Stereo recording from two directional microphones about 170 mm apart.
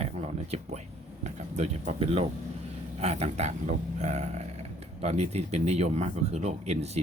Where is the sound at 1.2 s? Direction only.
40° right (ahead or behind).